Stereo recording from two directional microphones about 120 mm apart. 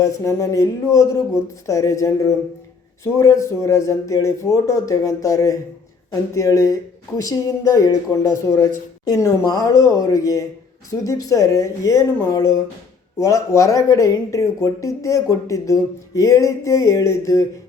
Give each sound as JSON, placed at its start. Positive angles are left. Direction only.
{"t": 0.0, "sound": "speech", "side_deg": 25}